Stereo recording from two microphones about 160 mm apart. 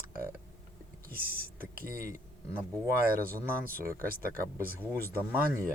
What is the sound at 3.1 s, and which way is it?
Speech, 65° right (ahead or behind).